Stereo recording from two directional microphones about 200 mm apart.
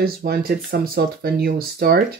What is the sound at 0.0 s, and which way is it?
Speech, 50° right (ahead or behind).